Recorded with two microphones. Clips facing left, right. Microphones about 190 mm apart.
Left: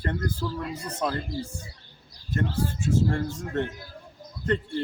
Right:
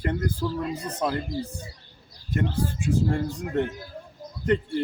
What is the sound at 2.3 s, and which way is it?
Speech, 15° right (ahead or behind).